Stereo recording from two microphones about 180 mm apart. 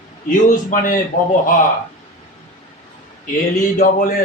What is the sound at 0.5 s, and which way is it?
Speech, 45° left (ahead or behind).